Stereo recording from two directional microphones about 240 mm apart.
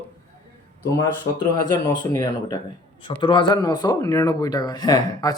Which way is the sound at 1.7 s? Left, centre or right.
Centre.